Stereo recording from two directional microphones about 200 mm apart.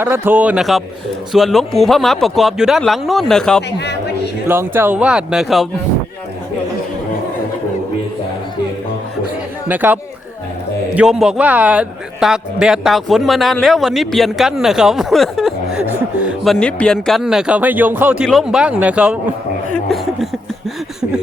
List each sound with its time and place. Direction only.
0.0 s a man's voice: 10° right (ahead or behind)
3.8 s speech: 55° left (ahead or behind)
4.4 s speech: 10° right (ahead or behind)
9.6 s a man's voice: 10° right (ahead or behind)